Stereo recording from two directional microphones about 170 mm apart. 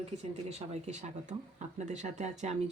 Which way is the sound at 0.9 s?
45° right (ahead or behind).